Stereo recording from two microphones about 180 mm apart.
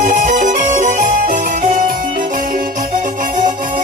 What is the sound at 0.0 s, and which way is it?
Music, 45° right (ahead or behind).